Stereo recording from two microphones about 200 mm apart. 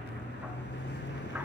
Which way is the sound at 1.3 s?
10° right (ahead or behind).